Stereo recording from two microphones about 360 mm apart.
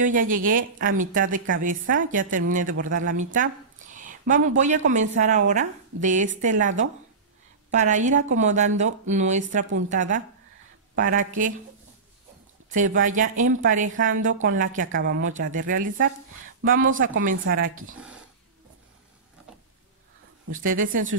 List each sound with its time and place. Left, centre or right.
0.0 s a woman's voice: right
13.0 s a woman's voice: right
20.5 s a woman's voice: right